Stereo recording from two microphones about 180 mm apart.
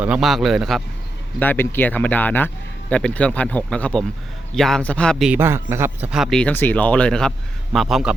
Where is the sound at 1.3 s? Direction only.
10° left (ahead or behind).